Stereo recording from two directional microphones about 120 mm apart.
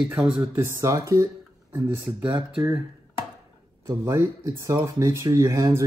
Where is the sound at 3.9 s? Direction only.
25° right (ahead or behind).